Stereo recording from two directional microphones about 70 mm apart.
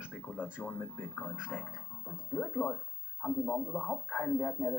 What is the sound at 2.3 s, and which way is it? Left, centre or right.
Speech, centre.